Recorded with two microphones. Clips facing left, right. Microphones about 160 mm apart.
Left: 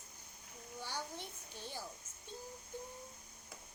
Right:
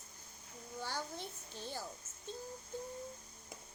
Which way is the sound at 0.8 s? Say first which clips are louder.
Right 2 dB; 15° left (ahead or behind).